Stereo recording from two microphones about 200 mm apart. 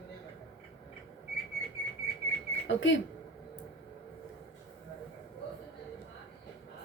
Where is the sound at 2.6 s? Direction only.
65° left (ahead or behind).